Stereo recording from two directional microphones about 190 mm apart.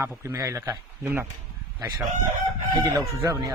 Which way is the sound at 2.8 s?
20° right (ahead or behind).